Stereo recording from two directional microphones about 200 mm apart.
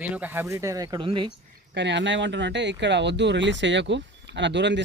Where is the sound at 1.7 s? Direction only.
60° right (ahead or behind).